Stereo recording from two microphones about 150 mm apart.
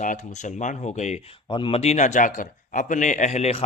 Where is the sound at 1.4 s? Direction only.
30° left (ahead or behind).